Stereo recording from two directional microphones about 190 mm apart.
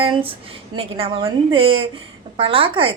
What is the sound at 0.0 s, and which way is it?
A woman's voice, 30° right (ahead or behind).